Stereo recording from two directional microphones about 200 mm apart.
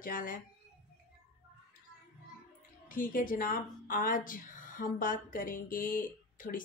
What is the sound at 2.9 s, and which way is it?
Speech, 45° left (ahead or behind).